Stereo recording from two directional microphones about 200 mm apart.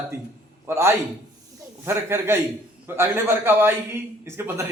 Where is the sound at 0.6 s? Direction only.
10° right (ahead or behind).